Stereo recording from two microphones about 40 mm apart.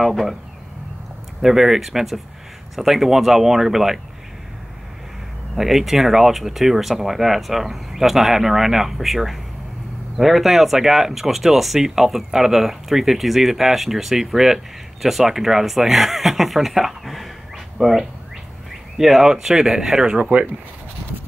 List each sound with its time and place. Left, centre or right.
0.0 s speech: centre
1.4 s speech: centre
5.6 s speech: centre
20.2 s speech: right